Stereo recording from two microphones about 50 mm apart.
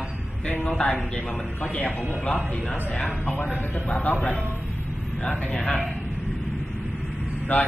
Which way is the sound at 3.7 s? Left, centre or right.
Left.